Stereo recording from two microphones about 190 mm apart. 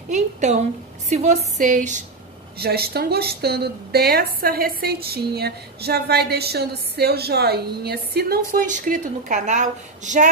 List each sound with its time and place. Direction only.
0.1 s a woman's voice: 40° right (ahead or behind)
2.6 s a woman's voice: 55° right (ahead or behind); by 10.2 s 40° right (ahead or behind)